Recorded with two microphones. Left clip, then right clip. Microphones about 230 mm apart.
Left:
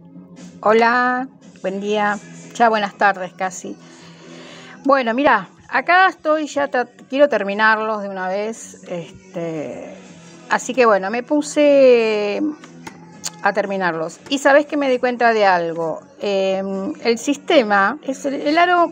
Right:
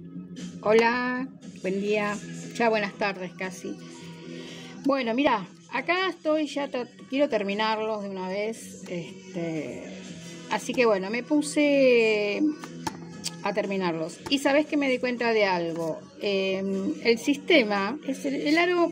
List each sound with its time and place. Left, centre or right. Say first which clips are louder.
0.6 s speech: left 8 dB; centre
2.5 s speech: left 9 dB; centre
4.8 s speech: left 9 dB; centre
10.5 s speech: left 9 dB; centre